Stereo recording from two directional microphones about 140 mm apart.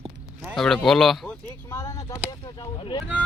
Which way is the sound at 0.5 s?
Centre (ahead or behind).